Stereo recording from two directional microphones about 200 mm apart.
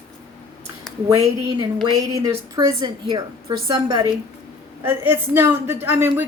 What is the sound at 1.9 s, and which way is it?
A woman's voice, 20° right (ahead or behind).